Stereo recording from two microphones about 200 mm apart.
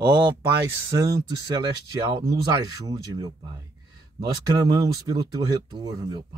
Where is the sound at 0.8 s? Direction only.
20° right (ahead or behind).